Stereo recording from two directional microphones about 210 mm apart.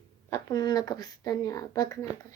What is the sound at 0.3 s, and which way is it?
Speech, 15° left (ahead or behind).